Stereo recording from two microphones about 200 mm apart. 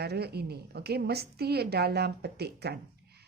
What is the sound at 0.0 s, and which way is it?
A woman's voice, 55° right (ahead or behind).